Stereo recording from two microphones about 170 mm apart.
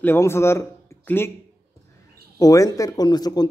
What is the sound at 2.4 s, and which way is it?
A man's voice, 20° left (ahead or behind).